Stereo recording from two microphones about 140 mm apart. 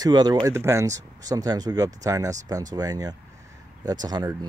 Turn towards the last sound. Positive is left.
turn(degrees=-30)  # may be behind; listen again after turning